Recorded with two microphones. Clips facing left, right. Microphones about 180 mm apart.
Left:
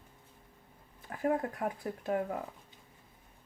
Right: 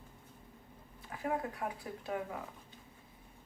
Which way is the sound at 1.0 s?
45° left (ahead or behind).